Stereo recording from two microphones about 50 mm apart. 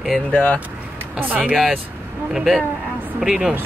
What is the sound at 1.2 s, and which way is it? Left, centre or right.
Speech, right.